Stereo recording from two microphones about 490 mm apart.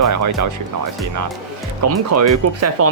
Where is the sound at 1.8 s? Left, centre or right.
Right.